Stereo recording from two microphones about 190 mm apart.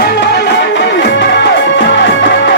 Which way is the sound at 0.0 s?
60° left (ahead or behind).